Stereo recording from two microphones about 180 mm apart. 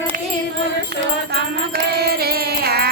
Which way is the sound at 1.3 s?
60° right (ahead or behind).